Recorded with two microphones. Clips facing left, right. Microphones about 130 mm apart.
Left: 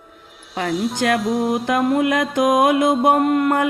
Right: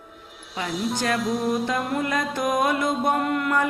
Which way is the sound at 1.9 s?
80° left.